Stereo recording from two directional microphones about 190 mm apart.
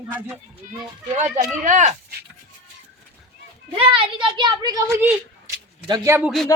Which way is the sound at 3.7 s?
30° right (ahead or behind).